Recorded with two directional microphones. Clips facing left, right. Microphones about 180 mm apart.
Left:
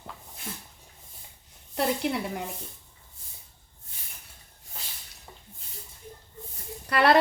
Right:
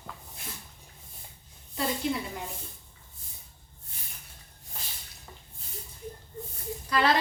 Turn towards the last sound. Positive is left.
turn(degrees=65)  # may be behind; listen again after turning